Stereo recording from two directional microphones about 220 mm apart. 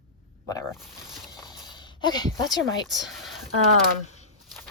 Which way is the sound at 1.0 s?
Centre (ahead or behind).